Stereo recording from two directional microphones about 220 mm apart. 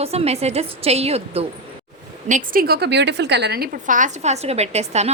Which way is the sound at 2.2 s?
35° right (ahead or behind).